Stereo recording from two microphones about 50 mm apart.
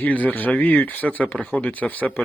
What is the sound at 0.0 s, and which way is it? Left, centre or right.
Speech, left.